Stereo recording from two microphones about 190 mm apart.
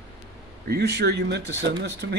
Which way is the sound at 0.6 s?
60° right (ahead or behind).